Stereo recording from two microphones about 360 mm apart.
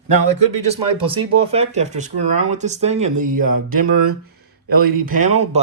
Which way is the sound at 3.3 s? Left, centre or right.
Right.